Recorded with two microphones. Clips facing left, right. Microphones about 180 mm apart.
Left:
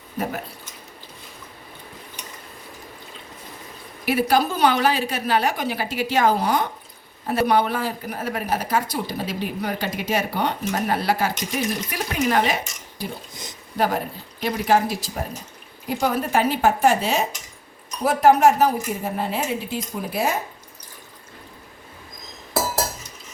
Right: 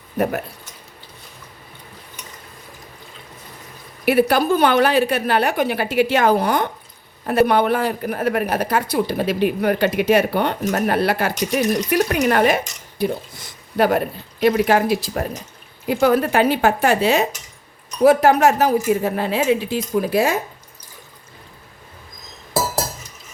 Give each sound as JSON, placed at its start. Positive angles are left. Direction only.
{"t": 4.0, "sound": "a woman's voice", "side_deg": -60}
{"t": 13.3, "sound": "a sound", "side_deg": 20}
{"t": 13.7, "sound": "a woman's voice", "side_deg": -65}